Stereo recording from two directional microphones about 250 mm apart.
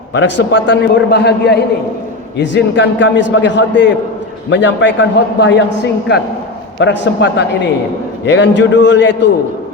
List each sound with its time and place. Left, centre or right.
0.1 s a man's voice: left